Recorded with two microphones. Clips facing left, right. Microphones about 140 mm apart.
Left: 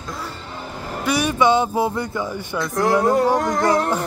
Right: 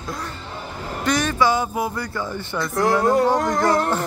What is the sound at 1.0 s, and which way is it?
Speech, 10° left (ahead or behind).